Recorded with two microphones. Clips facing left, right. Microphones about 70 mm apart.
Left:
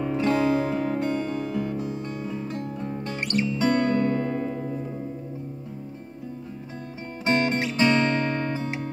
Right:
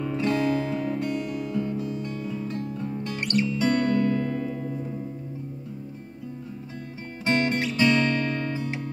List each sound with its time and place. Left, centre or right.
0.0 s music: left
7.2 s music: left